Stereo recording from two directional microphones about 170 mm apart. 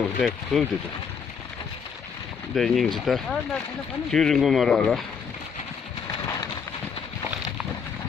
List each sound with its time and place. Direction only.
0.2 s speech: centre (ahead or behind)
2.5 s speech: centre (ahead or behind)
6.2 s a sound: 25° left (ahead or behind)